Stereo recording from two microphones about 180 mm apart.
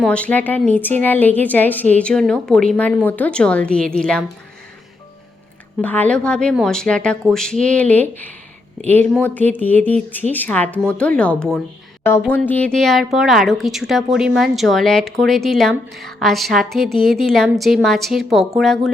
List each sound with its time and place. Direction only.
0.0 s a woman's voice: 5° left (ahead or behind)
5.8 s a woman's voice: 10° left (ahead or behind)